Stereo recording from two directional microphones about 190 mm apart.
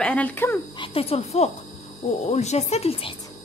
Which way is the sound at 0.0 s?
5° left (ahead or behind).